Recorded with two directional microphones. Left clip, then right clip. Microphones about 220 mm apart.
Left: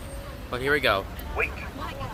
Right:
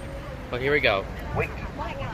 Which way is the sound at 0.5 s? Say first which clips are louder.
Right 1 dB; 15° left (ahead or behind).